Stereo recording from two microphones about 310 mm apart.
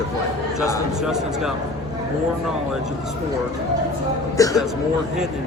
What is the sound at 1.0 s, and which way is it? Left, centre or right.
Speech, centre.